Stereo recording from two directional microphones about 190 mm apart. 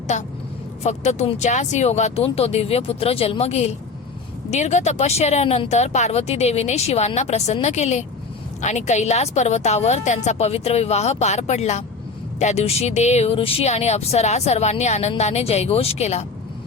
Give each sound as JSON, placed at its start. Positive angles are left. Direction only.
{"t": 0.1, "sound": "speech", "side_deg": 40}